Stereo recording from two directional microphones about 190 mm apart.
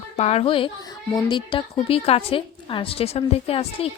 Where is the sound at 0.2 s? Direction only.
35° left (ahead or behind).